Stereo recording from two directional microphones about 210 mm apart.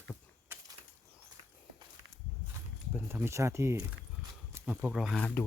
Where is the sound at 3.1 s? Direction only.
10° right (ahead or behind); by 5.4 s 5° left (ahead or behind).